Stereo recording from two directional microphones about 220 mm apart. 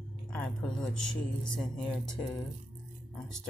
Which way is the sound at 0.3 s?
5° left (ahead or behind).